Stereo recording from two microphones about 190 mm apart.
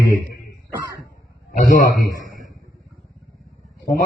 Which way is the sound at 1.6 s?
45° left (ahead or behind).